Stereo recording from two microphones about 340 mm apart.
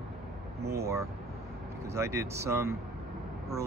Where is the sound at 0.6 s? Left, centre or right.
Right.